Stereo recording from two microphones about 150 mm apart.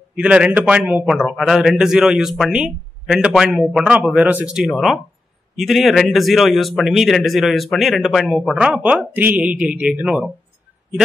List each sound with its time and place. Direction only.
0.1 s a man's voice: 5° right (ahead or behind)